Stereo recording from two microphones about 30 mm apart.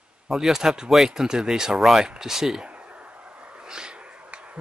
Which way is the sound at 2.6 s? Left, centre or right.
Right.